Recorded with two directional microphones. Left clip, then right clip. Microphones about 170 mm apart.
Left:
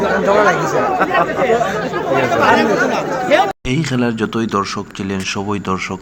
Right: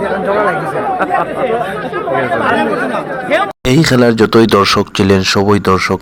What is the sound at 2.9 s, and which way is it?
A man's voice, 30° right (ahead or behind).